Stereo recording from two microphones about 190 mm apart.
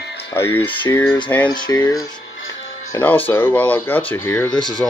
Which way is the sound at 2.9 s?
10° left (ahead or behind).